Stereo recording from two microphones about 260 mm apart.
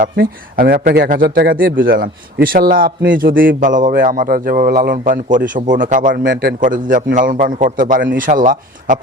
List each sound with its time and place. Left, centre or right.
0.0 s a man's voice: right
3.6 s a man's voice: right